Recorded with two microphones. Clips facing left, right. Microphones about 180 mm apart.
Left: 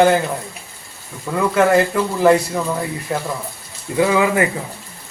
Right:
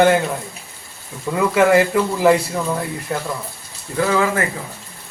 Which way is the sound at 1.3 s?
5° right (ahead or behind).